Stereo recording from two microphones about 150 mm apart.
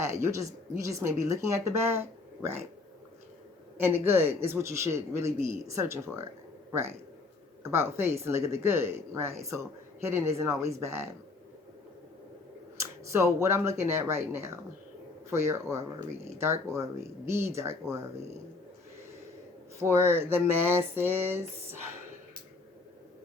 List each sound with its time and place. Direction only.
0.0 s a woman's voice: 20° right (ahead or behind)
3.8 s speech: 15° right (ahead or behind)
10.7 s speech: 20° right (ahead or behind)
13.1 s a woman's voice: 20° right (ahead or behind)
19.8 s speech: 15° right (ahead or behind)